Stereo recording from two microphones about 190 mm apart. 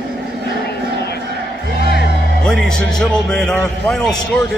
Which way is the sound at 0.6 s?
60° left (ahead or behind).